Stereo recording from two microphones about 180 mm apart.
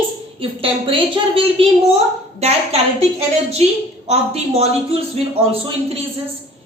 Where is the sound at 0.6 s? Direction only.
30° right (ahead or behind).